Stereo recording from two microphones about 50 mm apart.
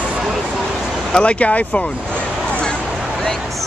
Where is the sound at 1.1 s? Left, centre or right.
Left.